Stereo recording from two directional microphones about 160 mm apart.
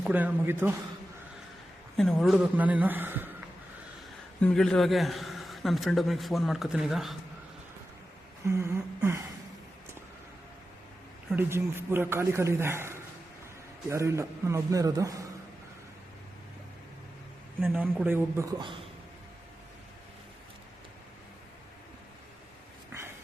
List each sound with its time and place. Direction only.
0.0 s a man's voice: 10° right (ahead or behind)
2.0 s a man's voice: centre (ahead or behind)
4.4 s a man's voice: 5° left (ahead or behind)
8.4 s a man's voice: 20° right (ahead or behind)
11.3 s a man's voice: 15° right (ahead or behind)
17.6 s a man's voice: 10° right (ahead or behind)